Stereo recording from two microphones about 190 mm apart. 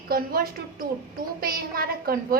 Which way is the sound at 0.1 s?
50° right (ahead or behind).